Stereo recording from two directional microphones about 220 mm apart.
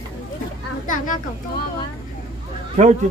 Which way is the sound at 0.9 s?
35° left (ahead or behind).